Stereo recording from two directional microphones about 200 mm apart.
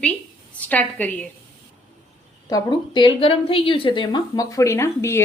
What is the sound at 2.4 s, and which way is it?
A woman's voice, 20° left (ahead or behind).